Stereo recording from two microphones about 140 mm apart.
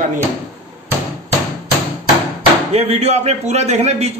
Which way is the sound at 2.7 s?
50° right (ahead or behind).